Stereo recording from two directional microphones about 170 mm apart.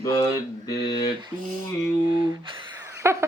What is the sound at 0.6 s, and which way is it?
Mantra, 25° left (ahead or behind).